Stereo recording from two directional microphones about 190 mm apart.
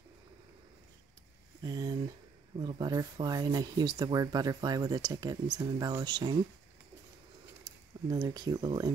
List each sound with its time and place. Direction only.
1.6 s speech: 20° right (ahead or behind)
7.6 s speech: 20° right (ahead or behind)